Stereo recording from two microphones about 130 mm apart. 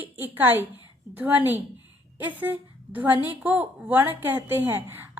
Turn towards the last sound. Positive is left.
turn(degrees=-15)  # may be behind; listen again after turning